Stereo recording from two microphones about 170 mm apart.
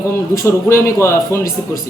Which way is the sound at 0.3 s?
15° left (ahead or behind).